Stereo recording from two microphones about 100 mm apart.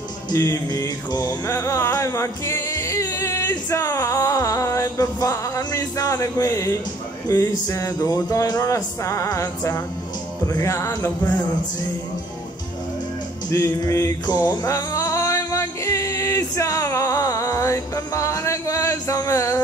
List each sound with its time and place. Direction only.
0.3 s music: 35° left (ahead or behind)
1.5 s music: 30° left (ahead or behind)
13.5 s music: 35° left (ahead or behind)
14.2 s music: 45° left (ahead or behind)